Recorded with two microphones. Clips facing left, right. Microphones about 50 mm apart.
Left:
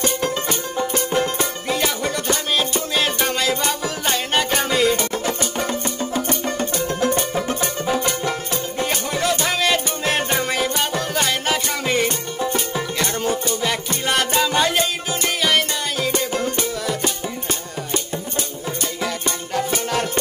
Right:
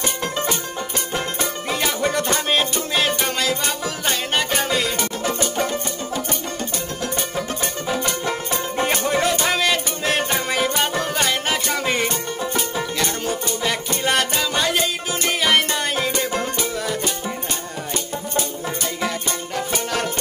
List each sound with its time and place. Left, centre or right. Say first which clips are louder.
0.2 s music: left 1 dB; centre
2.0 s music: right 2 dB; centre
2.9 s music: even; centre
7.0 s music: left 5 dB; centre
8.7 s music: right 4 dB; right
9.3 s music: even; centre
15.4 s music: right 1 dB; centre
19.0 s music: even; centre